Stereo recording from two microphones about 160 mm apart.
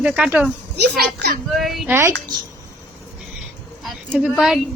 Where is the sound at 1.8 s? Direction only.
15° right (ahead or behind).